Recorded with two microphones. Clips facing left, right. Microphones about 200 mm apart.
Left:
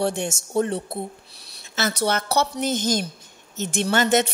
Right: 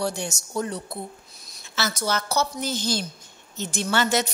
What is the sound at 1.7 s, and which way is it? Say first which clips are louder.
Speech: left 3 dB; 60° left (ahead or behind).